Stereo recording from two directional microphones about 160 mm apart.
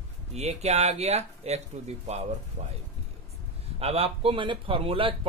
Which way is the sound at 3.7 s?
40° right (ahead or behind).